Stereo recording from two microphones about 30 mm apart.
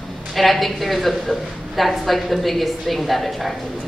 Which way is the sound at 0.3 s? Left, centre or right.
Centre.